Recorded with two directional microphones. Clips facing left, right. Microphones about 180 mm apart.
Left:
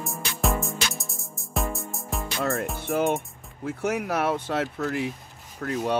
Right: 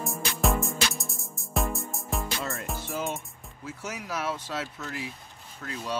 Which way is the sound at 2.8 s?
60° left (ahead or behind).